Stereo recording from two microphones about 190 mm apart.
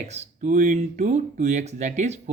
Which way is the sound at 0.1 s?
40° right (ahead or behind).